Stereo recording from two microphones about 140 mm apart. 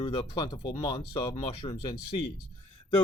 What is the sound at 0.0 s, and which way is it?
Speech, 35° left (ahead or behind).